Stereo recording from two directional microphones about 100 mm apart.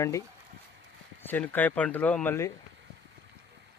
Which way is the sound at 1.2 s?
20° left (ahead or behind).